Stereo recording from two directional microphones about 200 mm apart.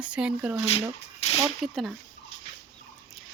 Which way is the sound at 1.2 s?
30° left (ahead or behind).